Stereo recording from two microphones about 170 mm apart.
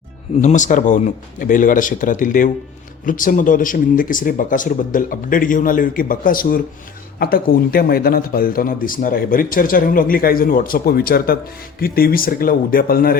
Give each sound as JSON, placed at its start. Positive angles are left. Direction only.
{"t": 0.4, "sound": "speech", "side_deg": 45}